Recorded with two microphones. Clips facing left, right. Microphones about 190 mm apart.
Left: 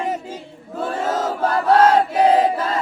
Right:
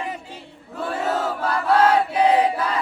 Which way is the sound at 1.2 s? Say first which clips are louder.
Left 4 dB; 45° left (ahead or behind).